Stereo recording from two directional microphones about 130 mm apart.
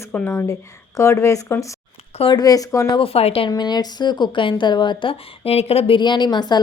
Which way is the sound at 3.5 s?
30° left (ahead or behind).